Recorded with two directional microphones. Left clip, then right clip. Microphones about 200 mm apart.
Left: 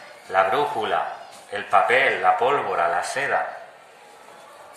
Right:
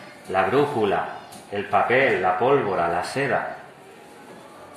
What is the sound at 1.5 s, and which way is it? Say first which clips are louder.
A man's voice: left 2 dB; 25° left (ahead or behind).